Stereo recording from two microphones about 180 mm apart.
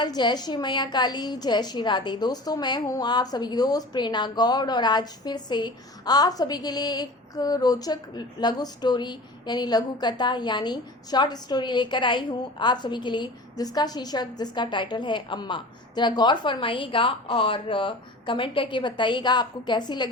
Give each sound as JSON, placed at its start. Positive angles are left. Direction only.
{"t": 0.0, "sound": "a woman's voice", "side_deg": 25}